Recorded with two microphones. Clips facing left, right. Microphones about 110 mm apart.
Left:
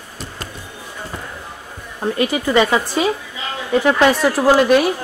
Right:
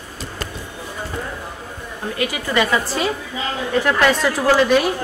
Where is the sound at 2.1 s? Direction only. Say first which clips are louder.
Left 4 dB; 25° left (ahead or behind).